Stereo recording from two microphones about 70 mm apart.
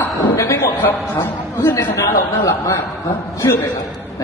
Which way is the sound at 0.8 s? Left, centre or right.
Left.